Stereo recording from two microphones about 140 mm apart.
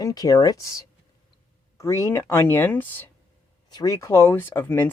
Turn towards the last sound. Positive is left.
turn(degrees=15)  # may be behind; listen again after turning